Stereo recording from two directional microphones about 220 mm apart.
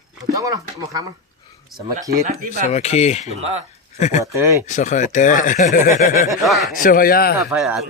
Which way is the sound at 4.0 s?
30° left (ahead or behind).